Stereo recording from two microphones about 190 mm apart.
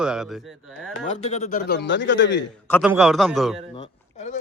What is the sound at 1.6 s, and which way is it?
Speech, 60° left (ahead or behind).